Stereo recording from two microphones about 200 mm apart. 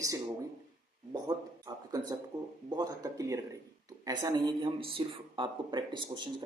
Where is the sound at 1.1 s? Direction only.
20° right (ahead or behind).